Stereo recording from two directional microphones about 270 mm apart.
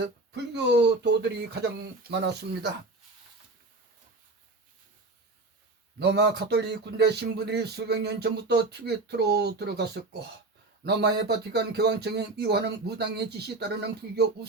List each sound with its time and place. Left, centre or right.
0.0 s speech: right
6.0 s speech: right